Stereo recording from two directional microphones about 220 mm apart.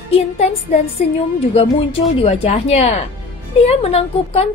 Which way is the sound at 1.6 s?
25° left (ahead or behind).